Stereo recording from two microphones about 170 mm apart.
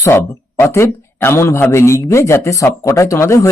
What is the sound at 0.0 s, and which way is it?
Speech, 15° left (ahead or behind).